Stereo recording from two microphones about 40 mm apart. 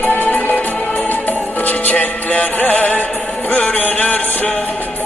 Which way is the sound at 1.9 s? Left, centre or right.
Left.